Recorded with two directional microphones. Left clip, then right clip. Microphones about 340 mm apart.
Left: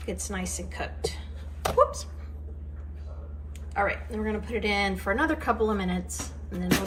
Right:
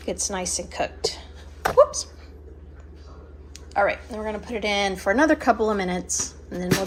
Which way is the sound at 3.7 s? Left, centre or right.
Centre.